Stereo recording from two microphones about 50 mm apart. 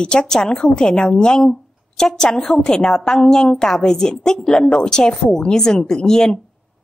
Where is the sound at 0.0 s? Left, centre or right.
Centre.